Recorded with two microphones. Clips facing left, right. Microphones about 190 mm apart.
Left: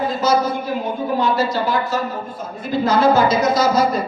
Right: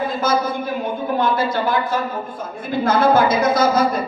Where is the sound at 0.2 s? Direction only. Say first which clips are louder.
Left 3 dB; 55° right (ahead or behind).